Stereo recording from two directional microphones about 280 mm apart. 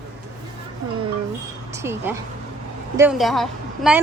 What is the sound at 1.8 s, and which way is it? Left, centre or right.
A woman's voice, centre.